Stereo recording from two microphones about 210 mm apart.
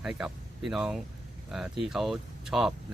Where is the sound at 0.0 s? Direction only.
5° right (ahead or behind).